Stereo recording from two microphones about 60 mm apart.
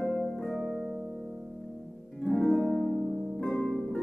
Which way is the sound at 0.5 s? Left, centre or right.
Centre.